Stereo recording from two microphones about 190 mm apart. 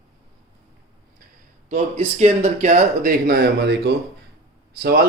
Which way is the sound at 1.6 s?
35° right (ahead or behind).